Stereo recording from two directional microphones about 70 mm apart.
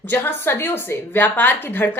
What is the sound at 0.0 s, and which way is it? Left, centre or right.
A woman's voice, left.